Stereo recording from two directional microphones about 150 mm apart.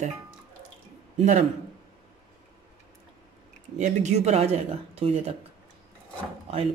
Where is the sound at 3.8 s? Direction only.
50° right (ahead or behind).